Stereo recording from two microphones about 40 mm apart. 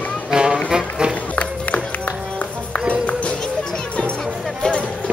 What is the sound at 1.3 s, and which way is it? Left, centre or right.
Music, left.